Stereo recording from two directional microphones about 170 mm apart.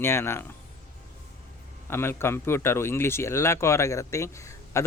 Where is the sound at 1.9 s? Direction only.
15° left (ahead or behind).